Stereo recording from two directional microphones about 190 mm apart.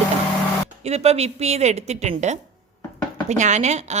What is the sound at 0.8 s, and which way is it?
A woman's voice, 35° right (ahead or behind).